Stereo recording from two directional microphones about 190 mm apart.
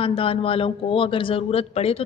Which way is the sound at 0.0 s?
30° left (ahead or behind).